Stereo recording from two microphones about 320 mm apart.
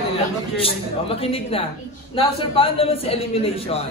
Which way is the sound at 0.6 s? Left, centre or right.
Centre.